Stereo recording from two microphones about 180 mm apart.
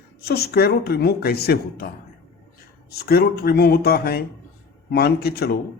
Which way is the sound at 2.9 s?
60° left (ahead or behind).